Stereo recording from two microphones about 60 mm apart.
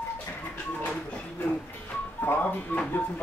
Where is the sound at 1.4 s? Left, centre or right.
Left.